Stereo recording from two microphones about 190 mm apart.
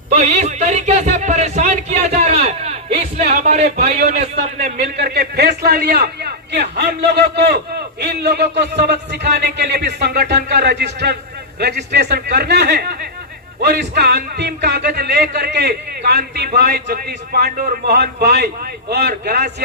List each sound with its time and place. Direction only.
0.1 s a sound: 35° right (ahead or behind)
3.2 s a man's voice: 35° right (ahead or behind)
4.9 s a man's voice: 55° right (ahead or behind)